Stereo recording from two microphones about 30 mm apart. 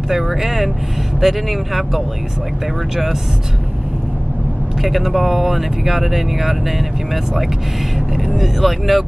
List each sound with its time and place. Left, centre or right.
0.1 s speech: centre
4.8 s speech: centre
8.3 s speech: centre